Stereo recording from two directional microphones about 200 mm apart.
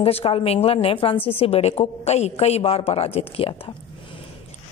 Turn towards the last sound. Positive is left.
turn(degrees=30)  # may be behind; listen again after turning